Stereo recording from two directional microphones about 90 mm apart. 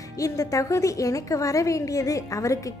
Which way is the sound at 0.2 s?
40° left (ahead or behind).